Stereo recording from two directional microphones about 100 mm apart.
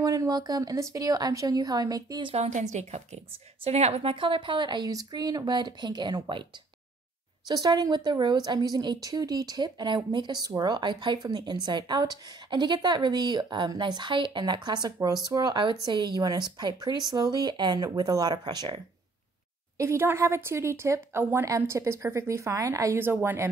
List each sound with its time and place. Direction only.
0.0 s a woman's voice: 35° right (ahead or behind)
2.2 s a woman's voice: 90° right; by 6.4 s 50° right (ahead or behind)
7.4 s a woman's voice: 40° right (ahead or behind)
19.8 s a woman's voice: 25° right (ahead or behind)